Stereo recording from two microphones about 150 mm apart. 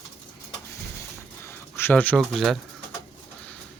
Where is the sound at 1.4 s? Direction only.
15° left (ahead or behind).